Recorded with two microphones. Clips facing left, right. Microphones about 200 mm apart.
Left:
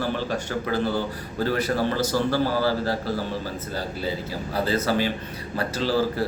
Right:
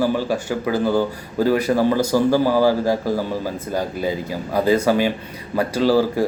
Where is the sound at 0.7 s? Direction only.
45° right (ahead or behind).